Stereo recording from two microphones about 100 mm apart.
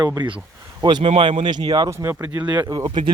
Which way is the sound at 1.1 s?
60° right (ahead or behind).